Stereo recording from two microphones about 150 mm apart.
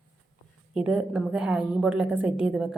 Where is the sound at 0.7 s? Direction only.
5° right (ahead or behind).